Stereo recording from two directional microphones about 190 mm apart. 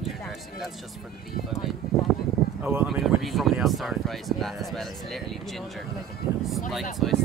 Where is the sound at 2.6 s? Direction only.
10° right (ahead or behind).